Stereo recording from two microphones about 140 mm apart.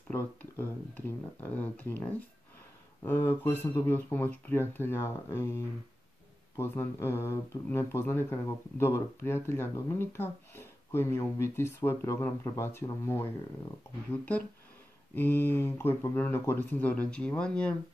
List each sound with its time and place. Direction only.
0.1 s speech: 15° left (ahead or behind)